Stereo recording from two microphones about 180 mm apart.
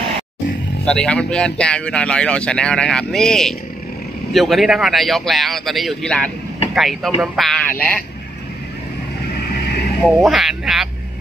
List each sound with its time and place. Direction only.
0.8 s a man's voice: 5° left (ahead or behind)
10.0 s a man's voice: centre (ahead or behind)